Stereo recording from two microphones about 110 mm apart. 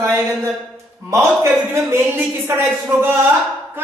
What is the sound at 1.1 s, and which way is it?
A woman's voice, 25° right (ahead or behind).